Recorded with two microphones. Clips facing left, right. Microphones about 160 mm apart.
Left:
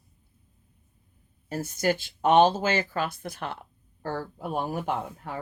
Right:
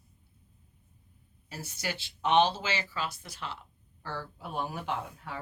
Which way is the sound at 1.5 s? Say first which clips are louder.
Left 11 dB; 50° left (ahead or behind).